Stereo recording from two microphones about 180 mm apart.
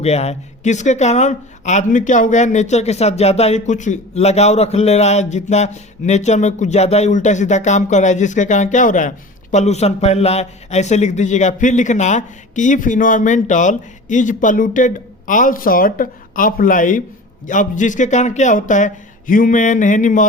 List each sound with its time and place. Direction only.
0.0 s a man's voice: 35° left (ahead or behind)